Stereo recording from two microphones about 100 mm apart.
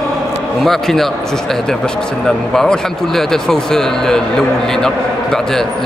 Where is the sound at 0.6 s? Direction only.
5° left (ahead or behind).